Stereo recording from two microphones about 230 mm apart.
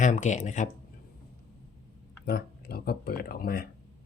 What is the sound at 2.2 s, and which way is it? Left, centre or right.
Speech, left.